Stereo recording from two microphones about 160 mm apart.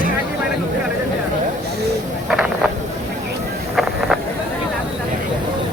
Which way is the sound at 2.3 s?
5° right (ahead or behind).